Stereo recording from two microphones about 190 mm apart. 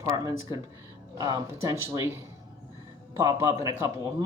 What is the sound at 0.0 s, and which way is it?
Speech, 15° right (ahead or behind).